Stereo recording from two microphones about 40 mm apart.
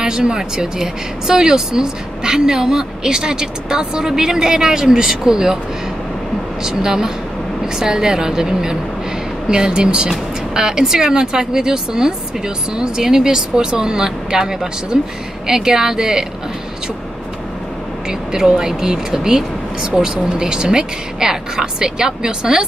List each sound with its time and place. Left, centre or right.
0.0 s speech: centre
6.6 s speech: centre
18.3 s speech: centre